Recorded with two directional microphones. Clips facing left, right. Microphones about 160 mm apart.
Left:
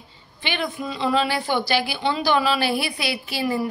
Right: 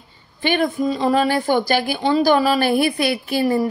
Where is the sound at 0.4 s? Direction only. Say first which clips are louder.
Right 8 dB; 45° right (ahead or behind).